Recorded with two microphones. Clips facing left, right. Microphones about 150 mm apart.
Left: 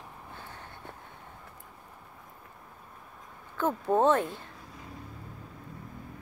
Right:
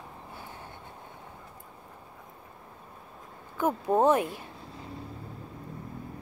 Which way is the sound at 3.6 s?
10° right (ahead or behind).